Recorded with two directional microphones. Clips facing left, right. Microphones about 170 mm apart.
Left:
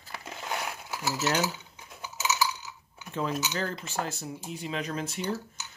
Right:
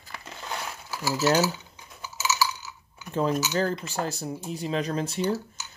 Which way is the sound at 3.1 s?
40° right (ahead or behind).